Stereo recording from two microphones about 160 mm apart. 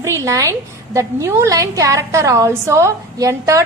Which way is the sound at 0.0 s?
20° right (ahead or behind).